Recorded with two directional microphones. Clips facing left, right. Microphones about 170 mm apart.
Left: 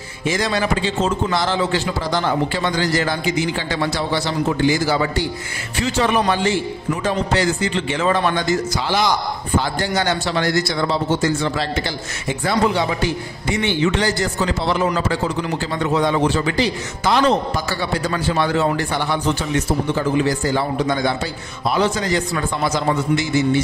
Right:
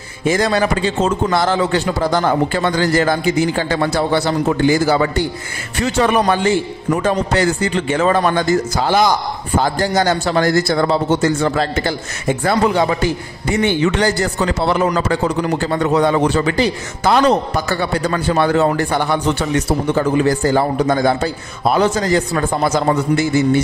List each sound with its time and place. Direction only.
0.2 s a man's voice: 50° right (ahead or behind)